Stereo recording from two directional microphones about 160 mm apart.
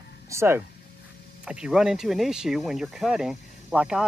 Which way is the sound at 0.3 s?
15° right (ahead or behind).